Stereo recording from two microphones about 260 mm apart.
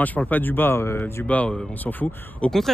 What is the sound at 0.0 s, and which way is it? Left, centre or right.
Speech, centre.